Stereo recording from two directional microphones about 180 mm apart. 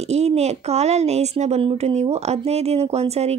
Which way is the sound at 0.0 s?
35° right (ahead or behind).